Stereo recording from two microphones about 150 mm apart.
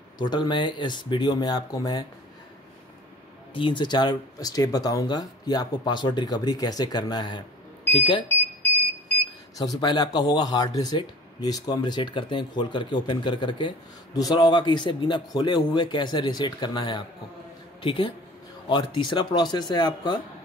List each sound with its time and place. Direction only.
0.2 s speech: 30° left (ahead or behind)
3.5 s speech: 35° left (ahead or behind)
9.8 s speech: 30° left (ahead or behind)